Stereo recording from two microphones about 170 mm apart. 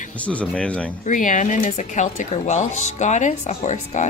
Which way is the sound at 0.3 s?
5° left (ahead or behind).